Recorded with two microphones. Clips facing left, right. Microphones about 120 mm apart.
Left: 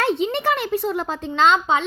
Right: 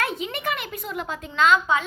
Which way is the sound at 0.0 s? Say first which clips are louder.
Left 7 dB; 30° left (ahead or behind).